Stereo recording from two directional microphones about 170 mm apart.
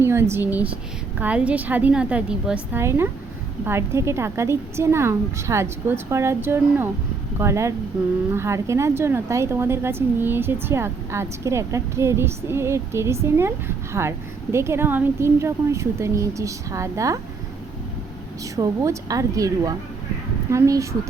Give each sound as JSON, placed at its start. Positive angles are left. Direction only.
{"t": 0.0, "sound": "a woman's voice", "side_deg": -15}
{"t": 18.5, "sound": "a woman's voice", "side_deg": -20}